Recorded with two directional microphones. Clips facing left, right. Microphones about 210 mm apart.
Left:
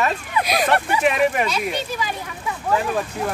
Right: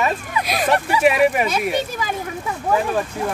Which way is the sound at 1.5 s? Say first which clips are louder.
Right 3 dB; 50° right (ahead or behind).